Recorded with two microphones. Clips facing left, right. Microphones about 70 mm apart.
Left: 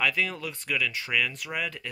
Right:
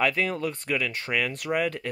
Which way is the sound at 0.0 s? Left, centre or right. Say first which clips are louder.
Right 3 dB; right.